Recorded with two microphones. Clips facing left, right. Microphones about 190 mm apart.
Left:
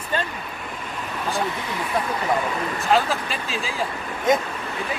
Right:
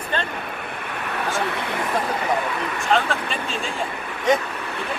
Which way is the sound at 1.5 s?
65° right (ahead or behind).